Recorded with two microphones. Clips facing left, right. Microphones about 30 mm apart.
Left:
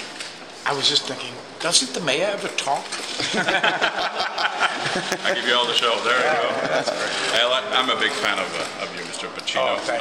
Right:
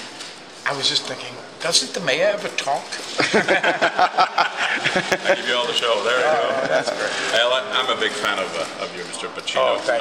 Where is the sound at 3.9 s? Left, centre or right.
Centre.